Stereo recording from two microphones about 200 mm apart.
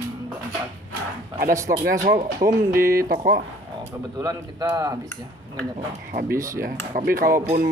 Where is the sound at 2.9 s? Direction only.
50° right (ahead or behind).